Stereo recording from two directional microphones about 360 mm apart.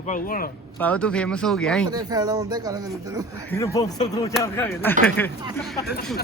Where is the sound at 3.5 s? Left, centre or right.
Centre.